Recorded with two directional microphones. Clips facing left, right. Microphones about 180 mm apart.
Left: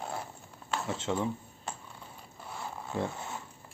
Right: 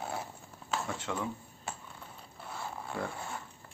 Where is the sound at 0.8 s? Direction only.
25° left (ahead or behind).